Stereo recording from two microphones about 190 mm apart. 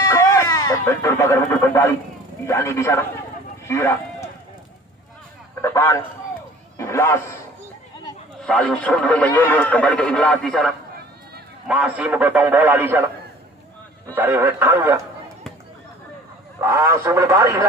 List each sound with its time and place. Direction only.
0.1 s radio: 15° left (ahead or behind)
2.4 s a man's voice: 15° left (ahead or behind)
3.6 s a sound: 15° left (ahead or behind)
5.6 s a man's voice: 15° left (ahead or behind)
8.5 s a man's voice: 5° left (ahead or behind); by 13.0 s 10° right (ahead or behind)
14.0 s a man's voice: 10° right (ahead or behind)
16.6 s a man's voice: 15° right (ahead or behind)